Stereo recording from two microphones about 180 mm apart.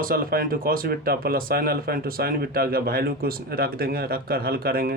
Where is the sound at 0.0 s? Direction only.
50° right (ahead or behind).